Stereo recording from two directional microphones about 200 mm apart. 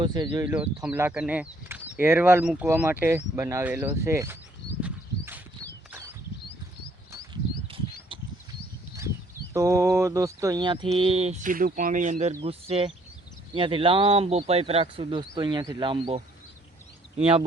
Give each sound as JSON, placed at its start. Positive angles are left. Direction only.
{"t": 0.0, "sound": "speech", "side_deg": -20}
{"t": 0.4, "sound": "speech", "side_deg": -5}
{"t": 4.8, "sound": "a sound", "side_deg": -10}
{"t": 9.5, "sound": "speech", "side_deg": -15}